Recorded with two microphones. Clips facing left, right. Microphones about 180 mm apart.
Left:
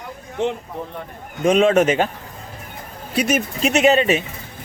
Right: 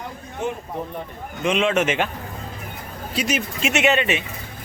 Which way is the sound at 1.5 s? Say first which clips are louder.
Left 6 dB; 40° left (ahead or behind).